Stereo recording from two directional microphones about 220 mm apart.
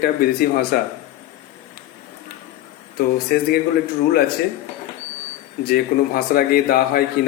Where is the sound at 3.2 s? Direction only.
45° left (ahead or behind).